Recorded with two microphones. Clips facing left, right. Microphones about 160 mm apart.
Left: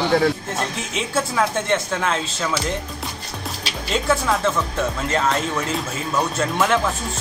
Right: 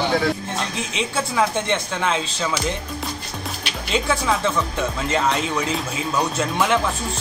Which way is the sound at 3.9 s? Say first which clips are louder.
Left 1 dB; centre (ahead or behind).